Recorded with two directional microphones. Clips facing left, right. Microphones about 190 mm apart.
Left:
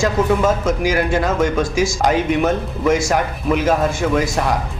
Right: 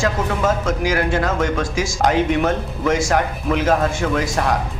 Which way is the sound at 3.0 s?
10° left (ahead or behind).